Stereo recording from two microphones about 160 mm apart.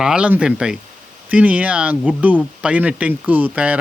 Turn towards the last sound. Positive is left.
turn(degrees=-10)  # may be behind; listen again after turning